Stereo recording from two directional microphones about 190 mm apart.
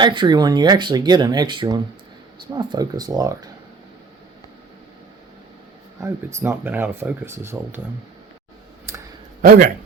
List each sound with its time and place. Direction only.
0.0 s speech: 25° right (ahead or behind)
6.0 s speech: 15° right (ahead or behind)
8.9 s clicking: 10° right (ahead or behind)
9.4 s speech: 50° right (ahead or behind)